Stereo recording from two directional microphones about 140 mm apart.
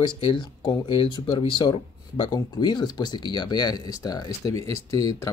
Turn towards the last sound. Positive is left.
turn(degrees=25)  # may be behind; listen again after turning